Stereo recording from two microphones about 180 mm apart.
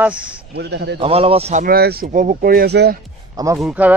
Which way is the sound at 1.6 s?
60° right (ahead or behind).